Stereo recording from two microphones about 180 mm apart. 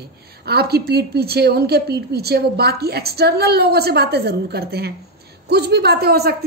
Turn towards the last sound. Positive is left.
turn(degrees=-60)  # may be behind; listen again after turning